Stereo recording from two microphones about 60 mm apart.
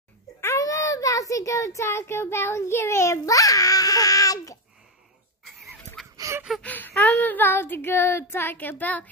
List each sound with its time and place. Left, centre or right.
0.6 s a child's voice: left
5.4 s a sound: centre
6.6 s child singing: left